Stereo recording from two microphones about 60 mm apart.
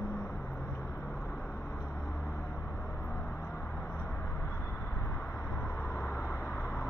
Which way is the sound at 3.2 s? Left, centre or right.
Left.